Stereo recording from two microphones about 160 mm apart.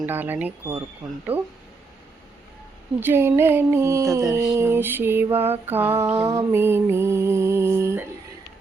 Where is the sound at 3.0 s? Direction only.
15° right (ahead or behind).